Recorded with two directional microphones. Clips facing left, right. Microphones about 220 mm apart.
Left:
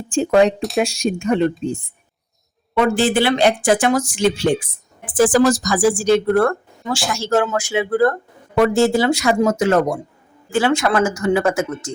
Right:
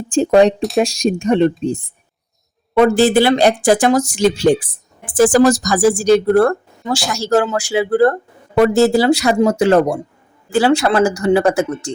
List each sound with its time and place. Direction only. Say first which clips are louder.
0.1 s speech: right 3 dB; 35° right (ahead or behind)
2.7 s speech: right 5 dB; 40° right (ahead or behind)